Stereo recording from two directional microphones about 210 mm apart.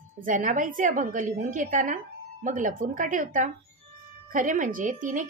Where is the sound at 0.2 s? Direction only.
40° right (ahead or behind).